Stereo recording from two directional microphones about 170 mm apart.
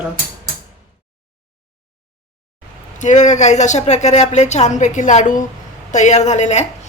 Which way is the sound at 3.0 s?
45° left (ahead or behind).